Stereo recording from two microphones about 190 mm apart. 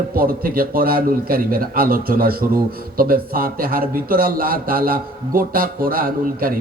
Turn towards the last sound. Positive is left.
turn(degrees=-50)  # may be behind; listen again after turning